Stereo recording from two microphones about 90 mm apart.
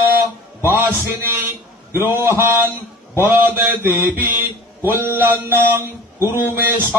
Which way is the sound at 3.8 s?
20° right (ahead or behind).